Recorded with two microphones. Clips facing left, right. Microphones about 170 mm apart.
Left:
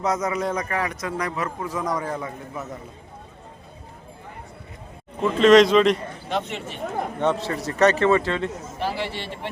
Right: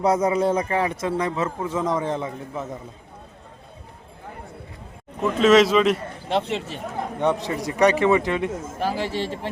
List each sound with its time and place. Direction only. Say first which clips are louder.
0.0 s a man's voice: right 5 dB; 30° right (ahead or behind)
5.2 s speech: left 2 dB; 5° right (ahead or behind)
6.2 s speech: right 4 dB; 30° right (ahead or behind)
7.2 s a man's voice: right 2 dB; 15° right (ahead or behind)
8.6 s speech: right 2 dB; 45° right (ahead or behind)